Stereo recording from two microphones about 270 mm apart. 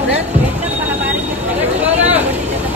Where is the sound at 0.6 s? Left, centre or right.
Centre.